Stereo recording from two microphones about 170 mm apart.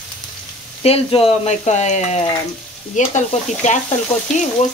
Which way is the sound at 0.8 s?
35° left (ahead or behind).